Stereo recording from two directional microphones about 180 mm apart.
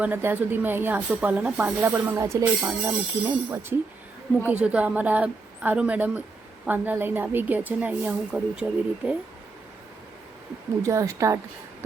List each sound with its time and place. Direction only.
0.0 s speech: 10° right (ahead or behind)
10.8 s speech: 15° right (ahead or behind)